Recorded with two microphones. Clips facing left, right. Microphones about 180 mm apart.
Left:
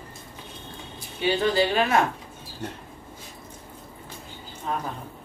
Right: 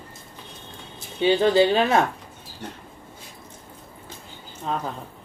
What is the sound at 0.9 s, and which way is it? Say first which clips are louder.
Speech: right 5 dB; 25° right (ahead or behind).